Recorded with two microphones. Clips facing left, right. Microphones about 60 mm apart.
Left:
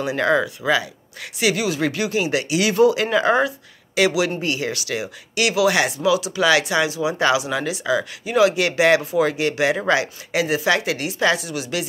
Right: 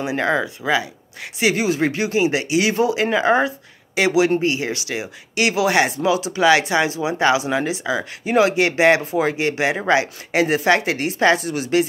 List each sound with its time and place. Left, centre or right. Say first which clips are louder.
0.0 s speech: left 1 dB; right
10.4 s speech: right 3 dB; right